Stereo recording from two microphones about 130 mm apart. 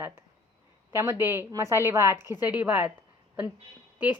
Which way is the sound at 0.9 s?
20° right (ahead or behind).